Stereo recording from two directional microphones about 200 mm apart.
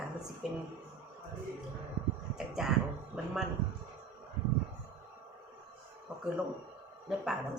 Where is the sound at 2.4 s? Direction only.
5° right (ahead or behind).